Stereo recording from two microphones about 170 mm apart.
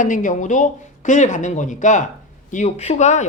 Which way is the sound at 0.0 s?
50° left (ahead or behind).